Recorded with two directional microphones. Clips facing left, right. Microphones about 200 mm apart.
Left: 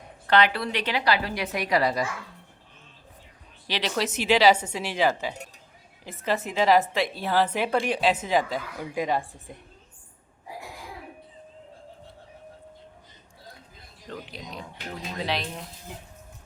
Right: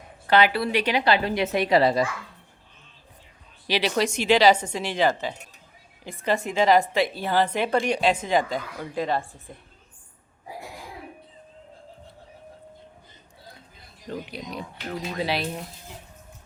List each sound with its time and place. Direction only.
0.3 s a woman's voice: 5° right (ahead or behind); by 2.0 s 25° right (ahead or behind)
3.7 s speech: 10° right (ahead or behind)
4.0 s a woman's voice: 5° left (ahead or behind)
14.1 s speech: 10° right (ahead or behind)